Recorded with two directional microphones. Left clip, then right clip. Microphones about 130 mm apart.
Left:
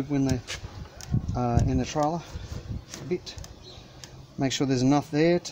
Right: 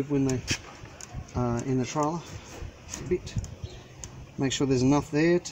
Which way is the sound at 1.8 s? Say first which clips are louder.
Left 1 dB; 30° left (ahead or behind).